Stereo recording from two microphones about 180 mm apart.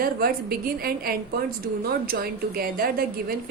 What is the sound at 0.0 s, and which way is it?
A woman's voice, 55° right (ahead or behind).